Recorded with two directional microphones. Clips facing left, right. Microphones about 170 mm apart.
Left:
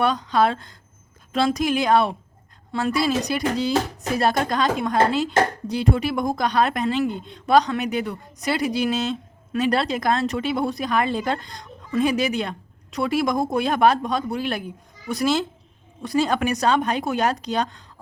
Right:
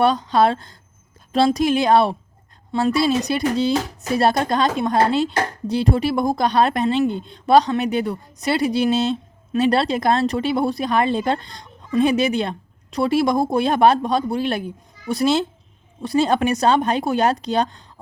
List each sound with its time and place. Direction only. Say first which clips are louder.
0.0 s a woman's voice: right 3 dB; 30° right (ahead or behind)